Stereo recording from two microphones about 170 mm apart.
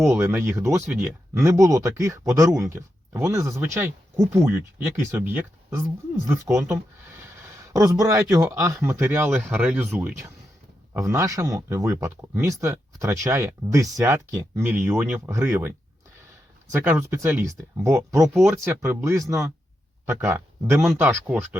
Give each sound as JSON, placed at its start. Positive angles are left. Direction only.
{"t": 0.0, "sound": "speech", "side_deg": -15}
{"t": 16.7, "sound": "speech", "side_deg": -15}